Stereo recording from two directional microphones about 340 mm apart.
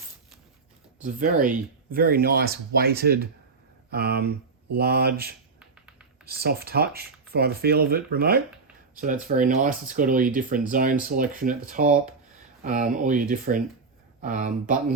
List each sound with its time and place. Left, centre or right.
1.0 s speech: right